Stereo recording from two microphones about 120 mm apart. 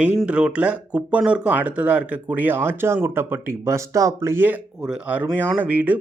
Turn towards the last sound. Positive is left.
turn(degrees=-15)  # may be behind; listen again after turning